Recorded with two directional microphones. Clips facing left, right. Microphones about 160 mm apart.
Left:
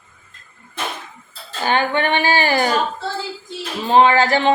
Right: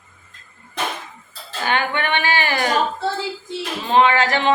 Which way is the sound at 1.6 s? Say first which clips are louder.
Left 3 dB; 30° left (ahead or behind).